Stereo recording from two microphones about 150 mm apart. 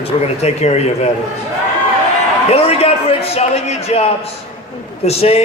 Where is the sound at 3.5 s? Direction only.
45° left (ahead or behind).